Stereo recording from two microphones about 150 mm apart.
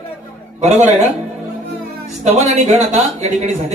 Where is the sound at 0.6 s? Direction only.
50° right (ahead or behind).